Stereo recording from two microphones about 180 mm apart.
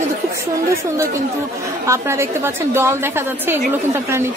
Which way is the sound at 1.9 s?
15° right (ahead or behind).